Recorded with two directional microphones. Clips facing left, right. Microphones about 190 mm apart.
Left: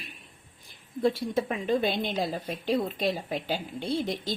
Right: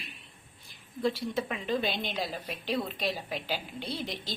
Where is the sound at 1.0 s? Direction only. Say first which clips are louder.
Left 4 dB; 50° left (ahead or behind).